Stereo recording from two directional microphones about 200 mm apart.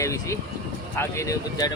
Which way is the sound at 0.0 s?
15° left (ahead or behind).